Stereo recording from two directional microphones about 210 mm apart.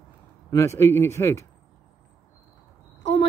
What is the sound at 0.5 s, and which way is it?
Speech, 10° left (ahead or behind).